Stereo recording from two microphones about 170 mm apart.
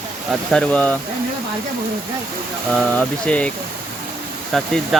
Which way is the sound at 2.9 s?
5° left (ahead or behind).